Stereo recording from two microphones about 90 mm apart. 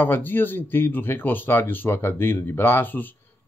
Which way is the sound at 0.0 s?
25° left (ahead or behind).